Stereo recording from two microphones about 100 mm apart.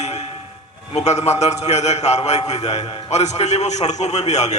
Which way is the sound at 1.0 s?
90° left.